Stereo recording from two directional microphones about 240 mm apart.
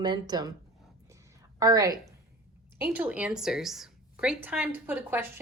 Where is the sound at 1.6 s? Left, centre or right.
Centre.